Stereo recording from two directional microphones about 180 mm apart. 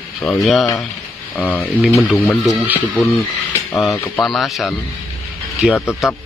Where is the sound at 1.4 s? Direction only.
15° left (ahead or behind).